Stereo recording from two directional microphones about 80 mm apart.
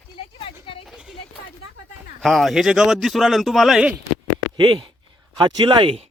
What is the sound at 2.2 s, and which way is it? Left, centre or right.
Speech, centre.